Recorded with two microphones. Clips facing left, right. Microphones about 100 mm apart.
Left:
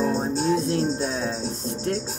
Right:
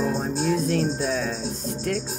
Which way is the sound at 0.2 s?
25° left (ahead or behind).